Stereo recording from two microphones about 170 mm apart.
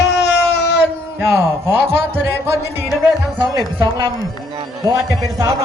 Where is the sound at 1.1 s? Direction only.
15° right (ahead or behind).